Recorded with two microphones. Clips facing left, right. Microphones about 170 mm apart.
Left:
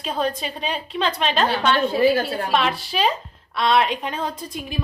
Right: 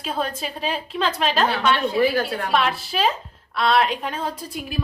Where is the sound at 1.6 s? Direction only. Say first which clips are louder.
Left 3 dB; 30° left (ahead or behind).